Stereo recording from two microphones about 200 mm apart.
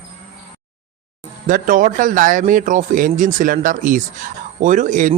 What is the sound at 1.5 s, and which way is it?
A man's voice, 45° right (ahead or behind).